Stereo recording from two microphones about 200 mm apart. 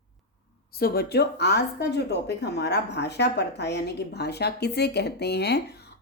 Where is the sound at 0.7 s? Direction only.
50° left (ahead or behind).